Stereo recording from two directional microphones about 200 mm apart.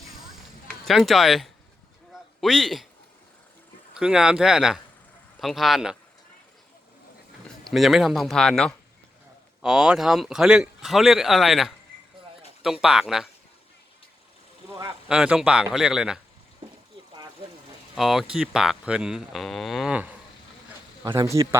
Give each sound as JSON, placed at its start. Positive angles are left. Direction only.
{"t": 0.9, "sound": "speech", "side_deg": 0}
{"t": 3.9, "sound": "speech", "side_deg": -5}
{"t": 7.6, "sound": "speech", "side_deg": 0}
{"t": 15.0, "sound": "speech", "side_deg": -5}
{"t": 17.9, "sound": "speech", "side_deg": 0}
{"t": 21.0, "sound": "speech", "side_deg": -15}